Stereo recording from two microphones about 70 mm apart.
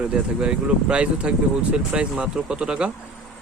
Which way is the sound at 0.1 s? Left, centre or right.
Centre.